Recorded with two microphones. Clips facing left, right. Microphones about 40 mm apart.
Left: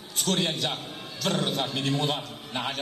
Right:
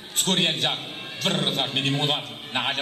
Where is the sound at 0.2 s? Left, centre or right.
Right.